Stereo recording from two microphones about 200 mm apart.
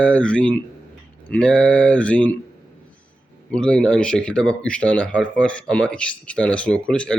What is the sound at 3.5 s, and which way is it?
Speech, 5° left (ahead or behind).